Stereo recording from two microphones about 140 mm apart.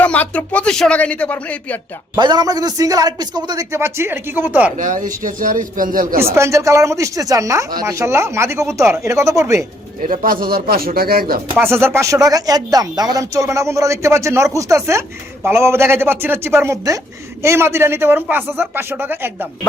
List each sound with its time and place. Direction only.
0.0 s speech: 10° left (ahead or behind)
2.1 s speech: 30° right (ahead or behind); by 4.7 s 15° right (ahead or behind)
4.8 s a man's voice: 65° right (ahead or behind)
6.3 s speech: 20° right (ahead or behind)
10.0 s speech: 75° right (ahead or behind); by 11.3 s 90° right
11.5 s speech: 15° right (ahead or behind)